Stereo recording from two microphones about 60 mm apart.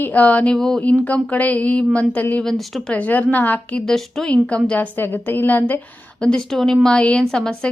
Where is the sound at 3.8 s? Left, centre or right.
Centre.